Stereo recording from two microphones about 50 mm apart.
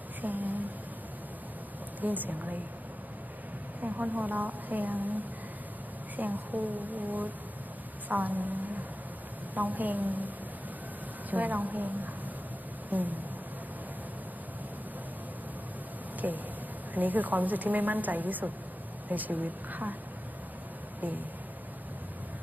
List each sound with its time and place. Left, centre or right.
0.2 s a sound: right
2.0 s a woman's voice: right
3.8 s a woman's voice: right
6.1 s a woman's voice: right
16.2 s a woman's voice: right